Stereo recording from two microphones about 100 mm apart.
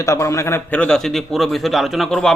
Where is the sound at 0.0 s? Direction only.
30° left (ahead or behind).